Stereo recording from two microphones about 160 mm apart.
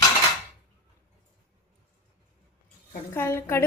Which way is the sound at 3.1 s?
15° left (ahead or behind).